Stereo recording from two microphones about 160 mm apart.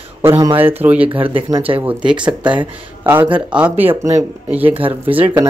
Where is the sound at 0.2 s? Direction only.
20° right (ahead or behind).